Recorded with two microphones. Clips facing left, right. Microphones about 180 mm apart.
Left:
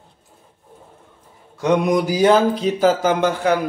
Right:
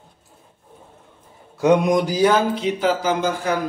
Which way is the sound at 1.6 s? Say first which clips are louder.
Right 1 dB; 5° right (ahead or behind).